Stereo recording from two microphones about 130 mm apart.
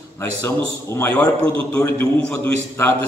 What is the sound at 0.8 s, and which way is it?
Speech, 20° left (ahead or behind).